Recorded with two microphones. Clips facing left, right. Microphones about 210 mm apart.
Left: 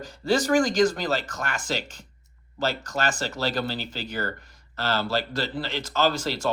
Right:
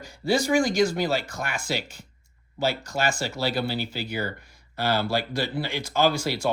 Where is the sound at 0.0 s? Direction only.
10° right (ahead or behind).